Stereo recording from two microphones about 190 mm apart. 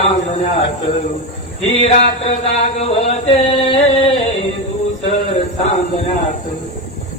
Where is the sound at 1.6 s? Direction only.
30° left (ahead or behind).